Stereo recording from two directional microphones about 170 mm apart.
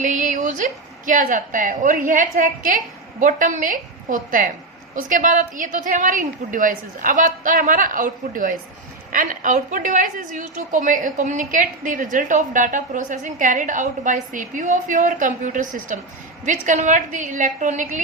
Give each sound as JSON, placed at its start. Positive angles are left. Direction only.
{"t": 0.0, "sound": "a woman's voice", "side_deg": -50}